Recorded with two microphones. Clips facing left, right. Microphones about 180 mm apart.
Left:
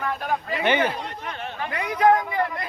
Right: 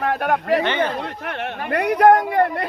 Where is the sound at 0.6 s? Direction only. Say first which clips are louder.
Even; 15° left (ahead or behind).